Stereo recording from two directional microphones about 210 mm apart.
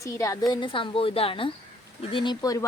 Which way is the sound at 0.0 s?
15° left (ahead or behind).